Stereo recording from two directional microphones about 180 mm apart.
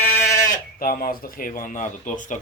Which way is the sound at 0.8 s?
50° left (ahead or behind).